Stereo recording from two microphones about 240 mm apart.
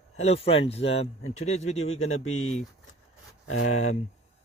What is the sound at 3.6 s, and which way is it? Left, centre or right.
Speech, left.